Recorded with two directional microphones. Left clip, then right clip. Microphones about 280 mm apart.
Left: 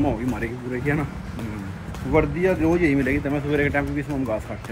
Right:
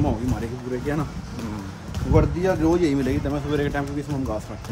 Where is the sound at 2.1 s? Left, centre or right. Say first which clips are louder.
Left 1 dB; centre.